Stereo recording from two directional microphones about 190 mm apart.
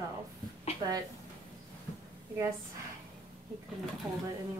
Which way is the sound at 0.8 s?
25° right (ahead or behind).